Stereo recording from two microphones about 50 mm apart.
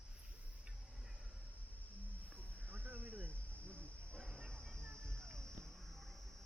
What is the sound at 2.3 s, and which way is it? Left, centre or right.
Snake, right.